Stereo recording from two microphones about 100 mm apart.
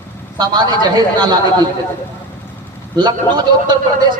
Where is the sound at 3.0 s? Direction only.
45° right (ahead or behind).